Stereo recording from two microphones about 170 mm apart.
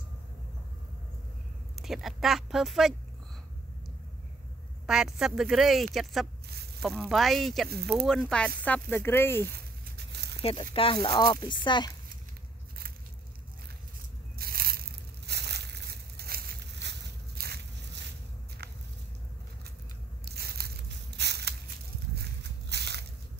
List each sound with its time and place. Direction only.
1.8 s speech: centre (ahead or behind)
4.8 s speech: 5° right (ahead or behind); by 9.5 s 15° left (ahead or behind)
9.5 s a sound: 75° right (ahead or behind)
10.4 s speech: 35° left (ahead or behind)
14.4 s crushing: 65° right (ahead or behind)
18.6 s biting: 70° right (ahead or behind)
20.2 s crushing: 65° right (ahead or behind)
21.2 s crushing: 80° right
22.7 s squish: 75° right (ahead or behind)